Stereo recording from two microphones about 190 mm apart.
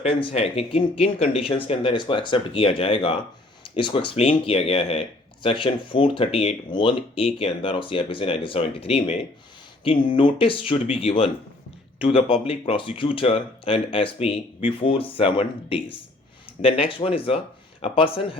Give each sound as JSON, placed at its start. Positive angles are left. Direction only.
{"t": 0.0, "sound": "speech", "side_deg": 30}